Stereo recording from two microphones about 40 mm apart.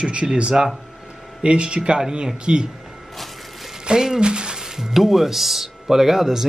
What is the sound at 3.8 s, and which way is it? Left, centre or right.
Speech, centre.